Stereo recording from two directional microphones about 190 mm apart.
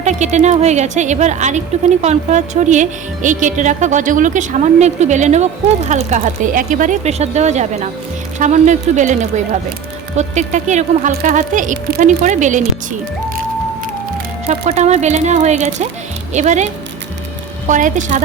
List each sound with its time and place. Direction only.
0.0 s a woman's voice: 35° right (ahead or behind)
14.4 s a woman's voice: 35° right (ahead or behind)
17.7 s a woman's voice: 40° right (ahead or behind)